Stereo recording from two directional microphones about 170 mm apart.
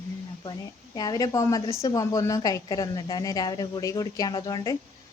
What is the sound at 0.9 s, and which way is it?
A woman's voice, 20° left (ahead or behind).